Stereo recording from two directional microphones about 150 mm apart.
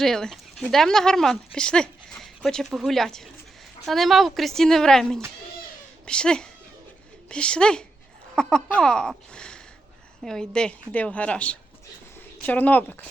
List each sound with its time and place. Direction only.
0.0 s a woman's voice: centre (ahead or behind)